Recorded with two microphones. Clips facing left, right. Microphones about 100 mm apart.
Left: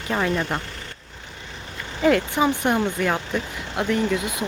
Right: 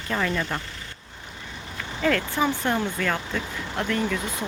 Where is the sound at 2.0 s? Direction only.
15° left (ahead or behind).